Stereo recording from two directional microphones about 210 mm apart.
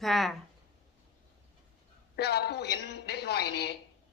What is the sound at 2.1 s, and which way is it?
Speech, 50° left (ahead or behind).